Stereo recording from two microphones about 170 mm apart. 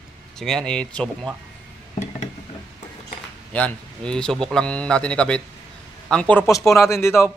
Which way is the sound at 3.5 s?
5° left (ahead or behind).